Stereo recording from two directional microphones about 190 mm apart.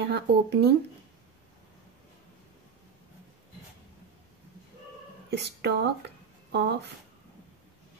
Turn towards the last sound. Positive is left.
turn(degrees=-65)  # may be behind; listen again after turning